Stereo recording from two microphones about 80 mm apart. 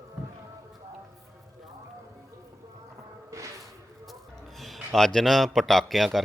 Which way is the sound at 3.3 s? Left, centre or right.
Right.